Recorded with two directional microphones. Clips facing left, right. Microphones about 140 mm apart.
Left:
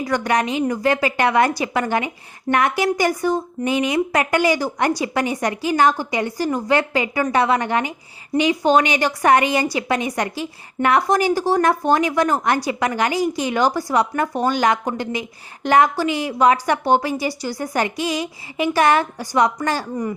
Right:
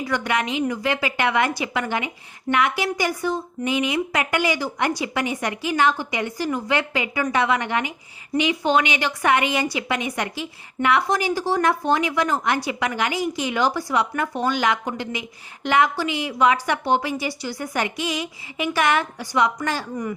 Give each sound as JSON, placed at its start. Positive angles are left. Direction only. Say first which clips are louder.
{"t": 0.0, "sound": "a woman's voice", "louder": "left 4 dB", "side_deg": 40}